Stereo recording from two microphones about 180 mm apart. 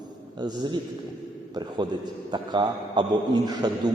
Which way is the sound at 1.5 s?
25° right (ahead or behind).